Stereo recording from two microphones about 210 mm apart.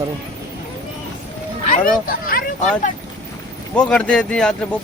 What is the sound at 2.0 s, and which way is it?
Speech, 45° left (ahead or behind).